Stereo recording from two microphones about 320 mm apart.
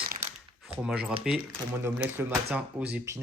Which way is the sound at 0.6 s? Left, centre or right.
Centre.